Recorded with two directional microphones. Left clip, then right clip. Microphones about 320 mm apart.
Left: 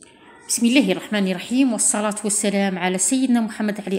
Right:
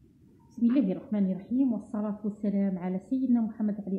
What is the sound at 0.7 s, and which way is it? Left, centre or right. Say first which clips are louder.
A woman's voice: left 10 dB; centre.